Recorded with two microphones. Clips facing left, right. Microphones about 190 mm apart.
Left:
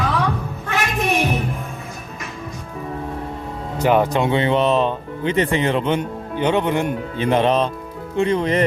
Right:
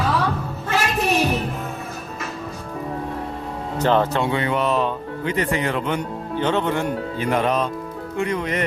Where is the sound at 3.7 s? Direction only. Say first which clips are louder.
Left 2 dB; 10° left (ahead or behind).